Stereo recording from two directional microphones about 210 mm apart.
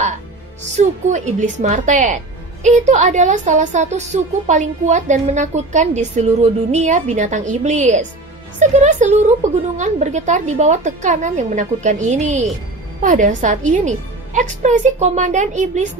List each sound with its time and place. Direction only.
0.7 s a woman's voice: 35° right (ahead or behind)